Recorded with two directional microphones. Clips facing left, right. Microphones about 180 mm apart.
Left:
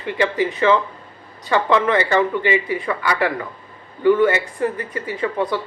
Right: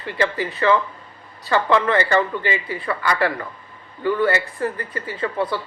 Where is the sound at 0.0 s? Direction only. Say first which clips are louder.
Left 3 dB; 20° left (ahead or behind).